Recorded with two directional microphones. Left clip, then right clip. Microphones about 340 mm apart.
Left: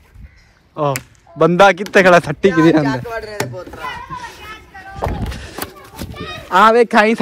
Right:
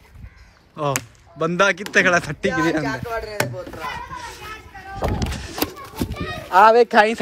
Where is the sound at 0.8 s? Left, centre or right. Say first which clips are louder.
Left 5 dB; centre.